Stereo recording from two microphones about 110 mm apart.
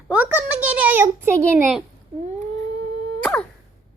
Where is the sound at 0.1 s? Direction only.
15° right (ahead or behind).